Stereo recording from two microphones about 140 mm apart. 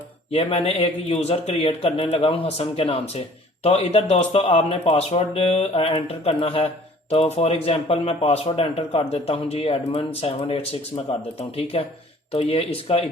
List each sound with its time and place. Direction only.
0.3 s speech: 45° left (ahead or behind)